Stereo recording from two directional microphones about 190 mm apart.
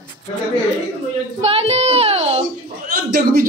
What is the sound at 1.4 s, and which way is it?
Child singing, 30° right (ahead or behind).